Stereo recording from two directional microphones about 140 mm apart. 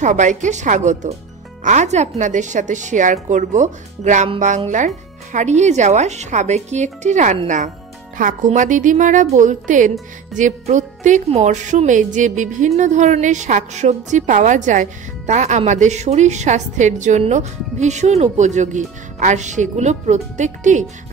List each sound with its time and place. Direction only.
0.0 s speech: 60° right (ahead or behind)
8.2 s speech: 70° right (ahead or behind)